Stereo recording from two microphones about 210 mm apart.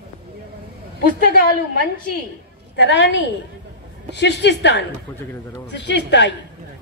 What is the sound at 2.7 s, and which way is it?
A woman's voice, 55° left (ahead or behind).